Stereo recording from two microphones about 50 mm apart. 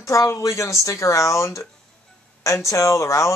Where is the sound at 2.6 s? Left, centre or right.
Left.